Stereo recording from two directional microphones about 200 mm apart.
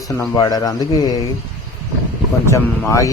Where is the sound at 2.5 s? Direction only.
15° left (ahead or behind).